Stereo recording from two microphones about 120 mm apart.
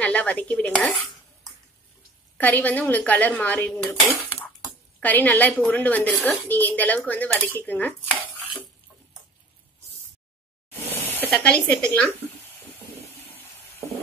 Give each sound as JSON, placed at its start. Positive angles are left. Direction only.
{"t": 0.0, "sound": "a woman's voice", "side_deg": 10}
{"t": 2.3, "sound": "a woman's voice", "side_deg": 15}
{"t": 4.2, "sound": "a sound", "side_deg": 15}
{"t": 5.0, "sound": "a woman's voice", "side_deg": 15}
{"t": 10.7, "sound": "a sound", "side_deg": 15}
{"t": 11.2, "sound": "a woman's voice", "side_deg": 5}